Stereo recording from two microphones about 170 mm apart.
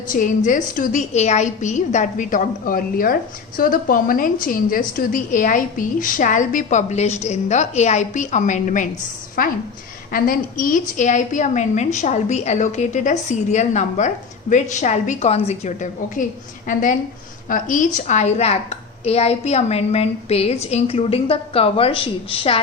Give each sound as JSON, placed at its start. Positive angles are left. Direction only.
{"t": 0.1, "sound": "a woman's voice", "side_deg": 50}